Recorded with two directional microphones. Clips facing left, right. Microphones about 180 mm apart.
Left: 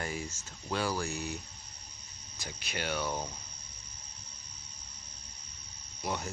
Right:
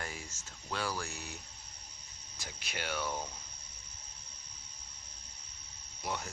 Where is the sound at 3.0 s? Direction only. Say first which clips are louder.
Left 3 dB; 15° left (ahead or behind).